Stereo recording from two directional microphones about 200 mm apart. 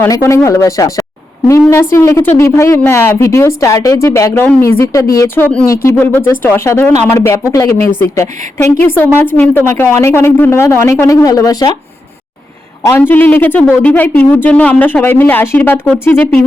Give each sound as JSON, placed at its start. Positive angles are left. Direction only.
{"t": 0.0, "sound": "speech", "side_deg": 15}
{"t": 12.8, "sound": "speech", "side_deg": 10}